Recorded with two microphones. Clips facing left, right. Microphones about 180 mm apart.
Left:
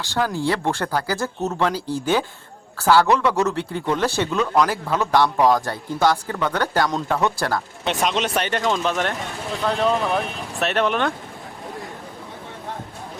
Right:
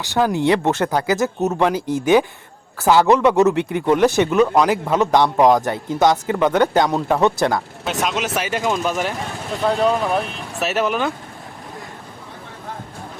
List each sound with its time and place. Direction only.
0.1 s speech: 15° right (ahead or behind)
7.9 s speech: 5° right (ahead or behind)